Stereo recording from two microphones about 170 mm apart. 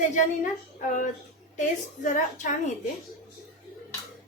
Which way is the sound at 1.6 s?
45° left (ahead or behind).